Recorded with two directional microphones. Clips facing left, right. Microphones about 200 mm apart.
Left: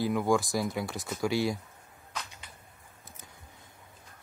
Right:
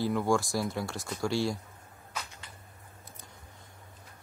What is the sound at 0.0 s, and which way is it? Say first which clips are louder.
Speech: left 1 dB; centre (ahead or behind).